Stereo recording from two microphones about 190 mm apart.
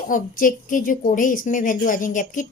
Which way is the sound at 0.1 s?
45° left (ahead or behind).